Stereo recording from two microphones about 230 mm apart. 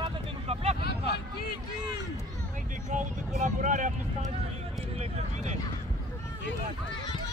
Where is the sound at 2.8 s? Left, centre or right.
Right.